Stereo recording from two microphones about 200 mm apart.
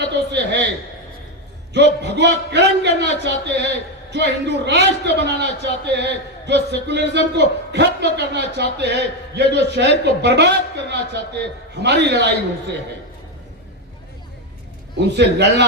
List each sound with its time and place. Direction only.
0.0 s a sound: 60° right (ahead or behind)
1.7 s a man's voice: 60° right (ahead or behind)
14.9 s a man's voice: 60° right (ahead or behind)